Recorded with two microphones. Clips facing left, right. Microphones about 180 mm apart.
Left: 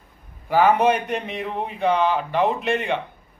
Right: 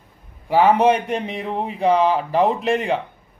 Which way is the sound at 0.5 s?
30° right (ahead or behind).